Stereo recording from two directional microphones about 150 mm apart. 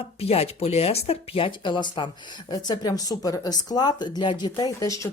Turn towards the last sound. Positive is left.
turn(degrees=25)  # may be behind; listen again after turning